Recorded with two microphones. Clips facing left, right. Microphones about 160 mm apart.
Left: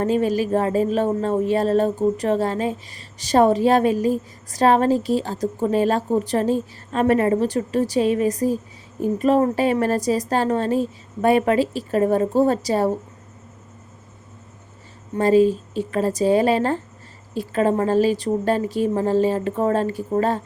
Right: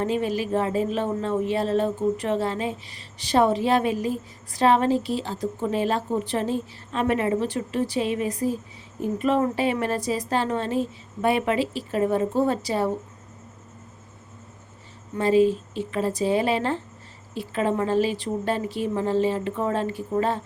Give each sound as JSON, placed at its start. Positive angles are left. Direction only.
{"t": 0.0, "sound": "a woman's voice", "side_deg": 40}
{"t": 15.1, "sound": "speech", "side_deg": 40}